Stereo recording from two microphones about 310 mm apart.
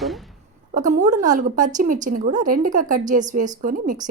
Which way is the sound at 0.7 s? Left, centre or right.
Right.